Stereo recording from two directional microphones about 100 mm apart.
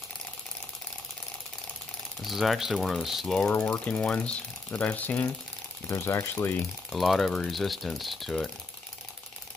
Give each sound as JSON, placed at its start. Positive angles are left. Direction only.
{"t": 2.2, "sound": "speech", "side_deg": 0}
{"t": 3.5, "sound": "speech", "side_deg": 25}
{"t": 3.8, "sound": "speech", "side_deg": 10}
{"t": 5.9, "sound": "speech", "side_deg": 25}
{"t": 6.9, "sound": "speech", "side_deg": 0}